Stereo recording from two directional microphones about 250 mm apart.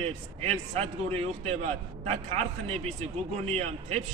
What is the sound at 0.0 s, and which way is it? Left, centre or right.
A man's voice, right.